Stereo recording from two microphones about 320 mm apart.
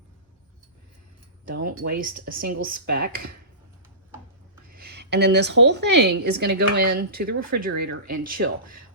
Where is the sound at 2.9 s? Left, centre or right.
Right.